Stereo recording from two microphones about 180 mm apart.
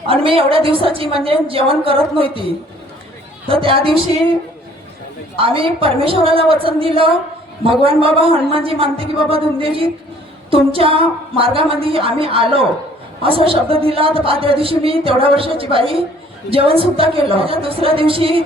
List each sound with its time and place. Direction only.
0.1 s a woman's voice: 30° right (ahead or behind)
3.5 s a woman's voice: 30° right (ahead or behind)
5.4 s a woman's voice: 30° right (ahead or behind)